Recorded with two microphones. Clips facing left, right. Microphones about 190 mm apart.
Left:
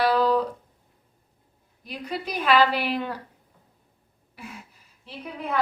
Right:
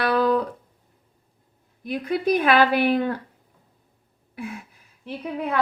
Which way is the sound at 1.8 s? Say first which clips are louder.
Right 8 dB; 55° right (ahead or behind).